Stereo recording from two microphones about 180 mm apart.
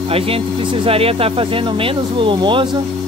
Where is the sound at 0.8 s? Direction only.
30° right (ahead or behind).